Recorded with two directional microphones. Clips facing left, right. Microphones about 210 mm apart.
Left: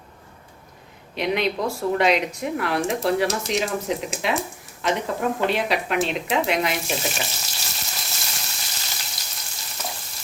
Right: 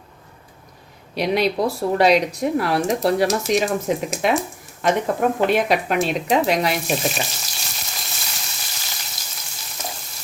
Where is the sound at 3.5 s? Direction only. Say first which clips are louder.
Right 4 dB; 45° right (ahead or behind).